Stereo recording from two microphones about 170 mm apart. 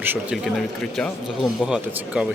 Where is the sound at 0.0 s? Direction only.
10° right (ahead or behind).